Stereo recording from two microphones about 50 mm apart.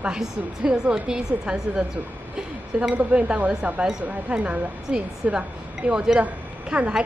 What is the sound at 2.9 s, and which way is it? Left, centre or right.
A woman's voice, right.